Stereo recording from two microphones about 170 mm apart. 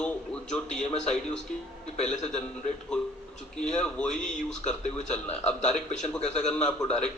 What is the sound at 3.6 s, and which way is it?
Speech, 5° left (ahead or behind).